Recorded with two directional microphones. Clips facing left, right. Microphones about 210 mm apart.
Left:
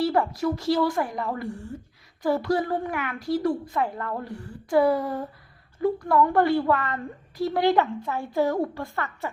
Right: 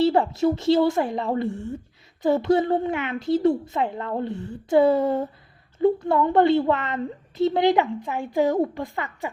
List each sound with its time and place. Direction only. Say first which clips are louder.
0.0 s a woman's voice: right 4 dB; 25° right (ahead or behind)